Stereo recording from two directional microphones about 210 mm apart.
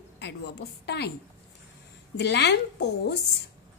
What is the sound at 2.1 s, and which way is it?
A woman's voice, 55° left (ahead or behind).